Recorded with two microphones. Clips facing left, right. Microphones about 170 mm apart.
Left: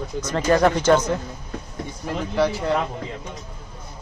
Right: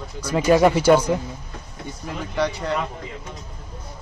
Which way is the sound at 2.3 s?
Centre (ahead or behind).